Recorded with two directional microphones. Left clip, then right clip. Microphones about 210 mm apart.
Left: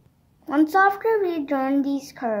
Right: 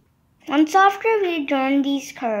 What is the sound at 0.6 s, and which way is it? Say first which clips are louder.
Speech: right 2 dB; 25° right (ahead or behind).